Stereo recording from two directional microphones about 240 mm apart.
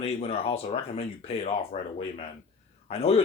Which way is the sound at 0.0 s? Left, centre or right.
Left.